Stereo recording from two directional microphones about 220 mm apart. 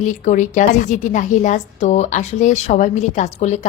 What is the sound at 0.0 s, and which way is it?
A woman's voice, 35° left (ahead or behind).